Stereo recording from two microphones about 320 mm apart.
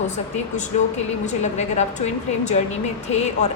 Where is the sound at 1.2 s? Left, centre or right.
Left.